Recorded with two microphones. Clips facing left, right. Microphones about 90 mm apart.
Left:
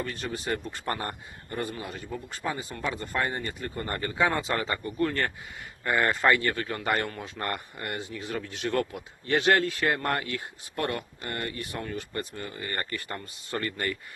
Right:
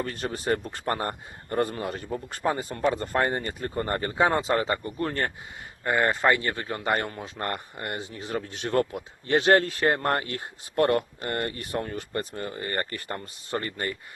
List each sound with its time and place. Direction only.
0.0 s a man's voice: 40° right (ahead or behind)
0.6 s a man's voice: 50° right (ahead or behind); by 14.0 s 25° right (ahead or behind)